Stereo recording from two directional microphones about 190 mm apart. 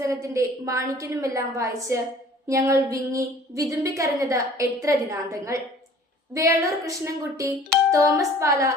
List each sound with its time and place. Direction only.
0.0 s a woman's voice: 15° right (ahead or behind)
6.6 s a woman's voice: 15° right (ahead or behind)